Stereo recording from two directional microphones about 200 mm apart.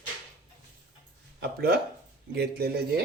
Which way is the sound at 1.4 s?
50° right (ahead or behind).